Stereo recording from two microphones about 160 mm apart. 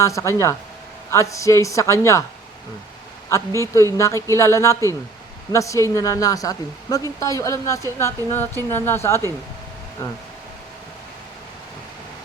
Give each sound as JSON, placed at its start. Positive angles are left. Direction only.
{"t": 0.0, "sound": "speech", "side_deg": 20}
{"t": 3.2, "sound": "a woman's voice", "side_deg": 20}